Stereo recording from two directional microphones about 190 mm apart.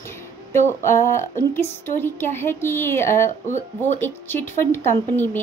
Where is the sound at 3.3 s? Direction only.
40° left (ahead or behind).